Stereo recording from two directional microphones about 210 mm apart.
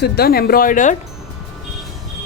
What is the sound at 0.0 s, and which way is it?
Speech, 50° left (ahead or behind).